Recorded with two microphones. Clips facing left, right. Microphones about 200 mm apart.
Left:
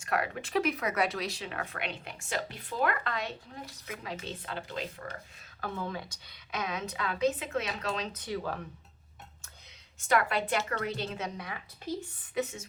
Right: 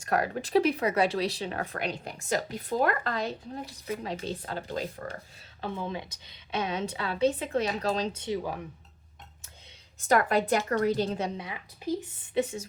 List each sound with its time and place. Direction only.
0.0 s speech: 35° right (ahead or behind)
5.5 s a woman's voice: 20° right (ahead or behind)
10.1 s speech: 40° right (ahead or behind); by 11.6 s 25° right (ahead or behind)
11.8 s a woman's voice: 10° right (ahead or behind)
12.3 s speech: 30° right (ahead or behind)